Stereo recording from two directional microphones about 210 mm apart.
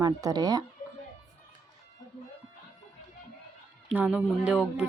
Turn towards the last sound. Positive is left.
turn(degrees=-5)  # may be behind; listen again after turning